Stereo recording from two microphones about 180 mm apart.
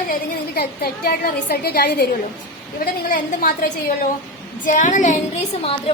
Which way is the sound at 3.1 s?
50° left (ahead or behind).